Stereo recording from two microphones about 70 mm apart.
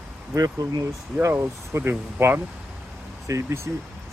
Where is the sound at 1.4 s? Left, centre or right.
Right.